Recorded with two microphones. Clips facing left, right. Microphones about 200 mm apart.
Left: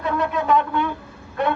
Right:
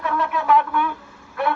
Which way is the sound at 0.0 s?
20° left (ahead or behind).